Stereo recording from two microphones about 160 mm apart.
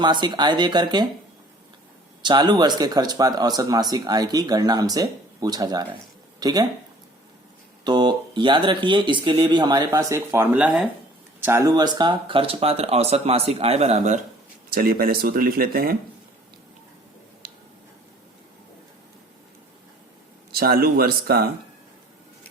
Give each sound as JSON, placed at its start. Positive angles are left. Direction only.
{"t": 0.0, "sound": "speech", "side_deg": -30}
{"t": 2.2, "sound": "speech", "side_deg": -30}
{"t": 7.9, "sound": "speech", "side_deg": -30}
{"t": 14.7, "sound": "speech", "side_deg": -65}
{"t": 20.5, "sound": "speech", "side_deg": -70}